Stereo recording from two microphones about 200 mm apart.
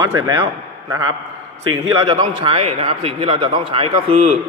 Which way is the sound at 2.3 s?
25° right (ahead or behind).